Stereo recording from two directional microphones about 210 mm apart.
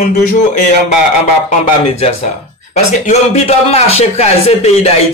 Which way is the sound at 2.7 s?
30° left (ahead or behind).